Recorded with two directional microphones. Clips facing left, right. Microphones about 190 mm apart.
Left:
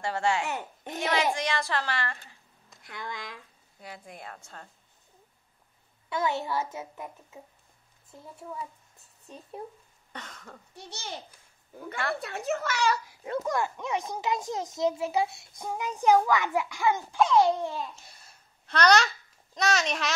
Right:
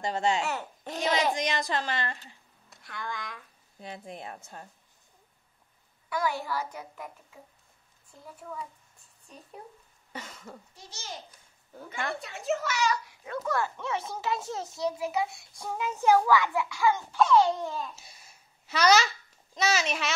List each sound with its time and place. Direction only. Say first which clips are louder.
0.0 s a woman's voice: even; 20° right (ahead or behind)
0.5 s speech: right 1 dB; 20° left (ahead or behind)
1.3 s a woman's voice: even; 20° right (ahead or behind)
2.8 s a child's voice: right 1 dB; 20° left (ahead or behind)
3.8 s a woman's voice: right 3 dB; 25° right (ahead or behind)
6.0 s a child's voice: left 1 dB; 25° left (ahead or behind)
10.1 s a sound: right 2 dB; 10° right (ahead or behind)
10.7 s a woman's voice: left 6 dB; 65° left (ahead or behind)
12.2 s a woman's voice: even; 60° left (ahead or behind)
13.2 s a child's voice: left 1 dB; 25° left (ahead or behind)
18.7 s a child's voice: left 1 dB; 5° right (ahead or behind)